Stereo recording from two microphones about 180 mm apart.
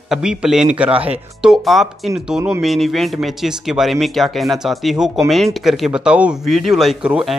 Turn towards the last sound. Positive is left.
turn(degrees=-5)  # may be behind; listen again after turning